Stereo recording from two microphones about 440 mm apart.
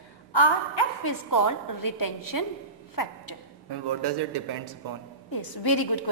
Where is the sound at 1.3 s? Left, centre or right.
Left.